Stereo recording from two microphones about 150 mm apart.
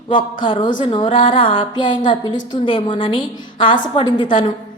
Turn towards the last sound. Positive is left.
turn(degrees=30)  # may be behind; listen again after turning